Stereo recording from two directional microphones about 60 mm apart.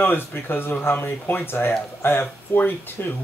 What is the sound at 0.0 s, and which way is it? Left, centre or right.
Speech, left.